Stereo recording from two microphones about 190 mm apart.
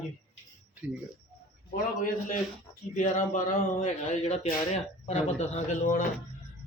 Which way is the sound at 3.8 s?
35° left (ahead or behind).